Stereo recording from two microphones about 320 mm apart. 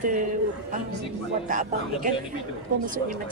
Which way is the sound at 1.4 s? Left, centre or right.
Right.